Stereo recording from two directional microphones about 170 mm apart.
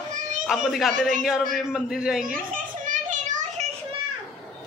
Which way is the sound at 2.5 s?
50° right (ahead or behind).